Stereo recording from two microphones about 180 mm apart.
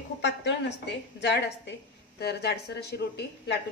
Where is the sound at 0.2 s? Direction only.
75° left (ahead or behind).